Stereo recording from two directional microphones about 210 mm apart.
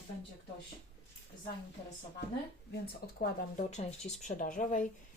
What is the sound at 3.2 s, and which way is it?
Speech, 35° left (ahead or behind).